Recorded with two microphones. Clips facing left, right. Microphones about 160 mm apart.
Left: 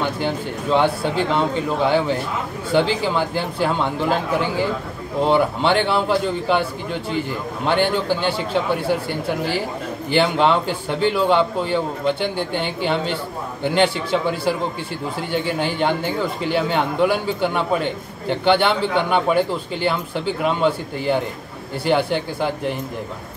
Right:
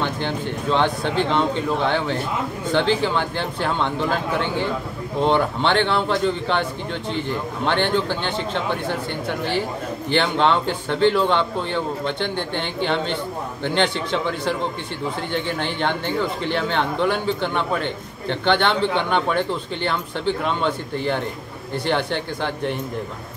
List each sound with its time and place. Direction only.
0.0 s a man's voice: 10° left (ahead or behind)
5.2 s a man's voice: 5° left (ahead or behind)
10.0 s a man's voice: 5° left (ahead or behind)